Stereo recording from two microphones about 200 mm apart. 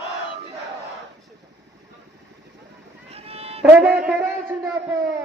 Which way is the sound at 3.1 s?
30° right (ahead or behind).